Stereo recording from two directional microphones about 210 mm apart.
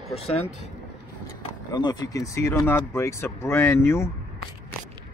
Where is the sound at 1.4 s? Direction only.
20° left (ahead or behind).